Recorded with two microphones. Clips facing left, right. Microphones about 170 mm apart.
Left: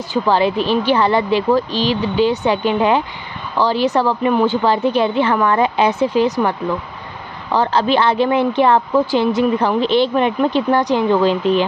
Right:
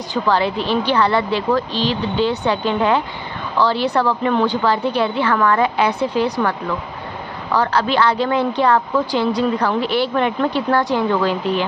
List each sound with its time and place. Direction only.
0.3 s speech: 15° left (ahead or behind)
7.5 s speech: 20° left (ahead or behind)